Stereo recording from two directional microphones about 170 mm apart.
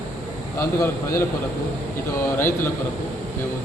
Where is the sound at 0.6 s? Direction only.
20° left (ahead or behind).